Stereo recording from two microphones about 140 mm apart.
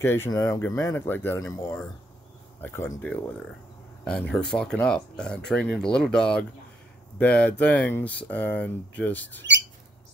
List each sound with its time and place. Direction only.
0.0 s speech: 15° left (ahead or behind)